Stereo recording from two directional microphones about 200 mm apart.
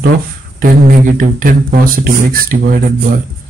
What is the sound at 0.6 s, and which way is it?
Speech, 45° right (ahead or behind).